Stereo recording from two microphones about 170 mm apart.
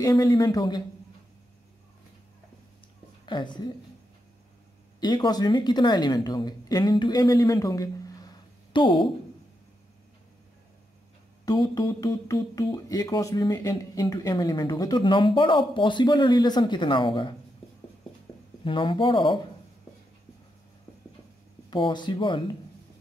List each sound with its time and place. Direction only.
0.0 s speech: 20° left (ahead or behind)
3.3 s speech: 25° left (ahead or behind)
5.0 s speech: 25° left (ahead or behind)
11.4 s speech: 25° left (ahead or behind)
18.6 s speech: 30° left (ahead or behind)
21.6 s speech: 25° left (ahead or behind)